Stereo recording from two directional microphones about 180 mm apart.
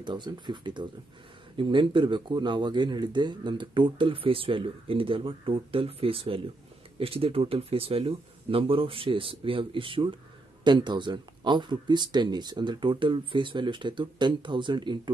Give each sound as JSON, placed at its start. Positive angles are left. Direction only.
{"t": 0.0, "sound": "speech", "side_deg": -25}